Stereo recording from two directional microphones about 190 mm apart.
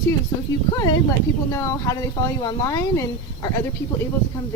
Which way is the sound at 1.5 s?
15° left (ahead or behind).